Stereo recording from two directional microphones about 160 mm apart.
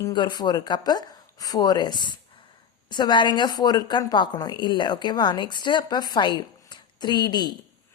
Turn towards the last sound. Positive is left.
turn(degrees=25)  # may be behind; listen again after turning